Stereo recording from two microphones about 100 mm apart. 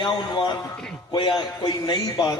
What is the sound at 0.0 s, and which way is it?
A man's voice, 50° left (ahead or behind).